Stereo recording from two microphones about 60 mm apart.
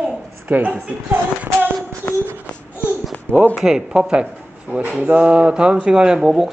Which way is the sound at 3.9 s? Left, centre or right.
Centre.